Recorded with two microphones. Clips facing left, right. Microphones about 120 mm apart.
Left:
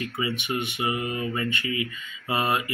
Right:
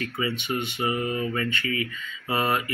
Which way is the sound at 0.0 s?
15° left (ahead or behind).